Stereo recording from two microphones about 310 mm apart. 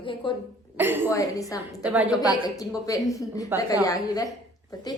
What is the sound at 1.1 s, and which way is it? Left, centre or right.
Speech, centre.